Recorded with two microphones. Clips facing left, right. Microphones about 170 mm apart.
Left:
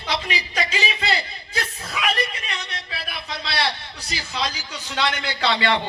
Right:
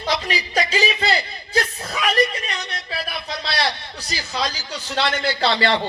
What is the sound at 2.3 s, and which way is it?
Music, 35° right (ahead or behind).